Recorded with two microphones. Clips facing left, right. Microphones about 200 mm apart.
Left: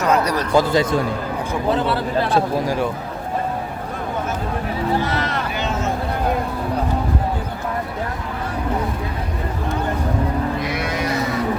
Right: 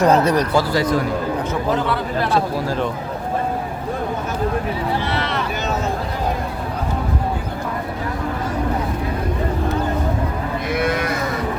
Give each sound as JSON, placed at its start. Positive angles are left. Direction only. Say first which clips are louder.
{"t": 0.0, "sound": "speech", "louder": "right 4 dB", "side_deg": -30}
{"t": 0.5, "sound": "a man's voice", "louder": "left 1 dB", "side_deg": 20}
{"t": 5.1, "sound": "vehicle", "louder": "even", "side_deg": 45}
{"t": 10.7, "sound": "cattle", "louder": "right 4 dB", "side_deg": -50}